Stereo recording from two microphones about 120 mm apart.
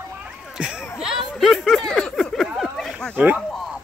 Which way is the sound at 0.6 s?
5° right (ahead or behind).